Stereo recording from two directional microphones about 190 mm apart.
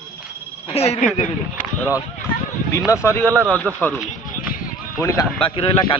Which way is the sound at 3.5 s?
5° left (ahead or behind).